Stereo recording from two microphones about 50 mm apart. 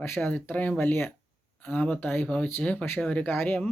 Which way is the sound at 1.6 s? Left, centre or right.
Left.